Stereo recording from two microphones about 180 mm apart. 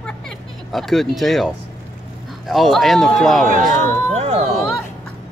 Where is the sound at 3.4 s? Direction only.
45° right (ahead or behind).